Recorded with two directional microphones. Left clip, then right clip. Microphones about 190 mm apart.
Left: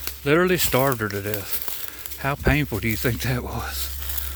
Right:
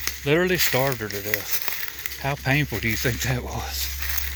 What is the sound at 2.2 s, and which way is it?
Speech, 35° left (ahead or behind).